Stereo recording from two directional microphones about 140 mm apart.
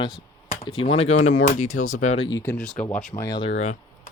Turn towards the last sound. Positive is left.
turn(degrees=45)  # may be behind; listen again after turning